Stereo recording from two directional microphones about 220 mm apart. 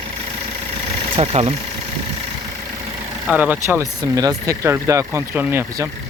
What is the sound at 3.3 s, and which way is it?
Speech, 5° right (ahead or behind).